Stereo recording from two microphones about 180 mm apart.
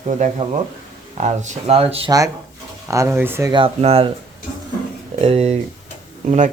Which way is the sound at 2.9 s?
15° right (ahead or behind).